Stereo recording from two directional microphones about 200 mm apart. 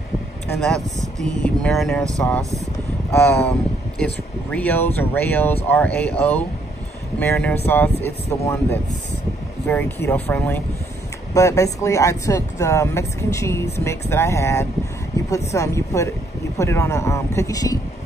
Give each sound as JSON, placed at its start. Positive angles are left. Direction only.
{"t": 1.4, "sound": "speech", "side_deg": 5}